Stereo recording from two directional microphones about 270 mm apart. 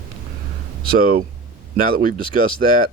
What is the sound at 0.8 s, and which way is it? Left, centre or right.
Speech, right.